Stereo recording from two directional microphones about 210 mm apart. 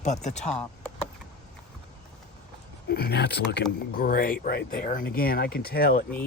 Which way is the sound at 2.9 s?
50° left (ahead or behind).